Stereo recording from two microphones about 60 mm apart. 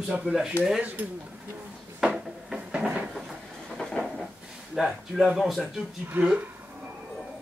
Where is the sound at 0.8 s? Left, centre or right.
Right.